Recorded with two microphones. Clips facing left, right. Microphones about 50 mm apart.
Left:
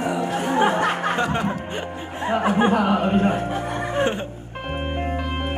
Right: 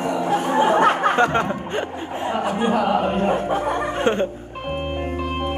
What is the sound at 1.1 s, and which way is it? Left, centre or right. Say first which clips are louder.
Chuckle: right 5 dB; right.